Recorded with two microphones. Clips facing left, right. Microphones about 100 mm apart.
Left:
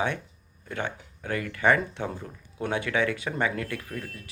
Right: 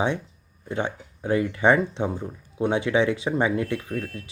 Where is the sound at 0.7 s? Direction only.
25° right (ahead or behind).